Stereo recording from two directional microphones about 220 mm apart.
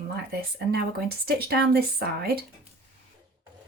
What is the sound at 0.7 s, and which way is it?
Speech, 45° right (ahead or behind).